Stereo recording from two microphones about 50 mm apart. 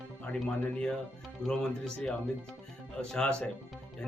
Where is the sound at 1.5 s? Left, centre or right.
Centre.